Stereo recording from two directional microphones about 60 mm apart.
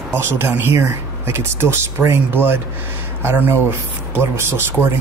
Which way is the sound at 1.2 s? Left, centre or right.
Right.